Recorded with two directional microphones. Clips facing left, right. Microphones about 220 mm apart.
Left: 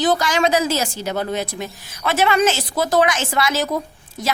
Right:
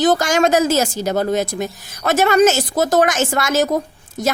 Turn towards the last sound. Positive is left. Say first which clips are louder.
# right 4 dB
turn(degrees=-45)  # may be behind; listen again after turning